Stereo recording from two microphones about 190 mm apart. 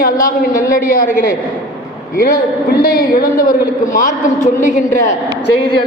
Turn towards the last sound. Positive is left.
turn(degrees=40)  # may be behind; listen again after turning